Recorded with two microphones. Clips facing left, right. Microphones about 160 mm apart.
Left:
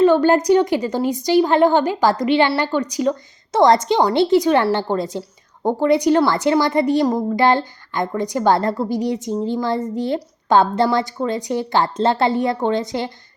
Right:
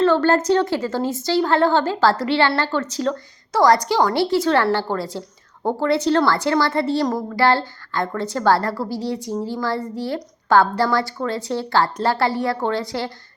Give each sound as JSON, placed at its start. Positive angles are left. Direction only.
{"t": 0.0, "sound": "a woman's voice", "side_deg": 15}